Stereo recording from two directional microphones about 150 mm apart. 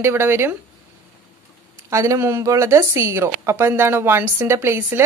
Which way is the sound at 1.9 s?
20° right (ahead or behind).